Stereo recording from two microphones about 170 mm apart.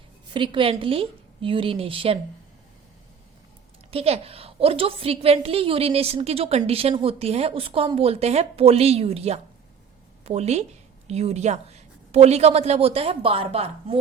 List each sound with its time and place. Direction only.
0.3 s a woman's voice: 30° right (ahead or behind)
3.9 s a woman's voice: 35° right (ahead or behind)